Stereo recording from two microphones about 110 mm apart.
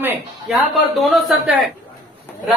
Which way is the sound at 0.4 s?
Centre (ahead or behind).